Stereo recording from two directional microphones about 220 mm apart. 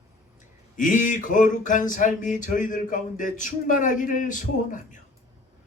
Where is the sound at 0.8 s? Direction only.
35° left (ahead or behind).